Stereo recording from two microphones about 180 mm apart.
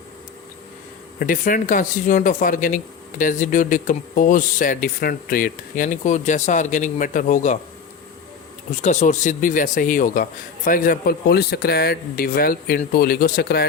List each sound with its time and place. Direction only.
1.2 s speech: 50° left (ahead or behind)
8.8 s a man's voice: 45° left (ahead or behind); by 13.7 s 60° left (ahead or behind)